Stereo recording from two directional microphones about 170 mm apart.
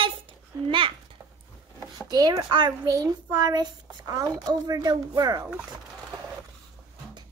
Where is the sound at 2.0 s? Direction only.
25° right (ahead or behind).